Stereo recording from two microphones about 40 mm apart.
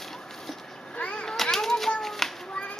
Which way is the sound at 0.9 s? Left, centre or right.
Left.